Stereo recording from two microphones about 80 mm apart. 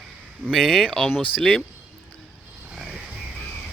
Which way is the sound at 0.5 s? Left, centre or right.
Centre.